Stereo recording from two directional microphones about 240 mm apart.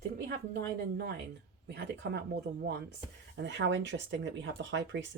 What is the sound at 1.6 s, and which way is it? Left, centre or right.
Speech, right.